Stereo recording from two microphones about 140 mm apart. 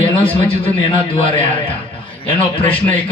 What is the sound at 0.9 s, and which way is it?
Speech, 40° left (ahead or behind).